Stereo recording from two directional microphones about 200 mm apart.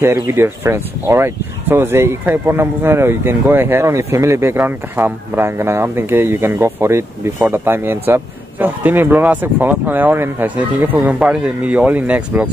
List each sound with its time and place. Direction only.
0.0 s speech: 10° right (ahead or behind)